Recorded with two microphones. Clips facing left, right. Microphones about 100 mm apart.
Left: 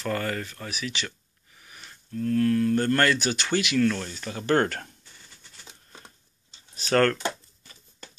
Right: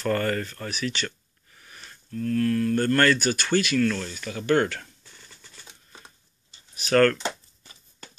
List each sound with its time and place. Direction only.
0.0 s speech: 10° left (ahead or behind)
2.0 s speech: 25° left (ahead or behind); by 4.8 s 40° left (ahead or behind)
6.7 s speech: 25° left (ahead or behind)